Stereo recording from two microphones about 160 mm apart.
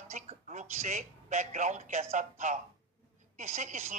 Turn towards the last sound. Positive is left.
turn(degrees=-50)  # may be behind; listen again after turning